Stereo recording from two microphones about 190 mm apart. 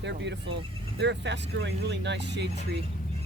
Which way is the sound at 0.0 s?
65° right (ahead or behind).